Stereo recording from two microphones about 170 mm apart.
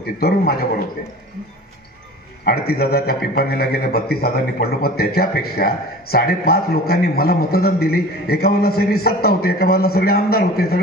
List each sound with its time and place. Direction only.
0.0 s a man's voice: 65° left (ahead or behind)
2.4 s a man's voice: 65° left (ahead or behind)